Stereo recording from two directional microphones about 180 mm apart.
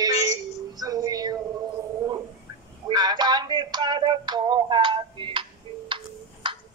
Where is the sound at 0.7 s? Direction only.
20° right (ahead or behind).